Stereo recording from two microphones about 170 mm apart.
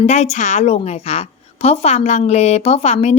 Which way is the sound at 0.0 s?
40° left (ahead or behind).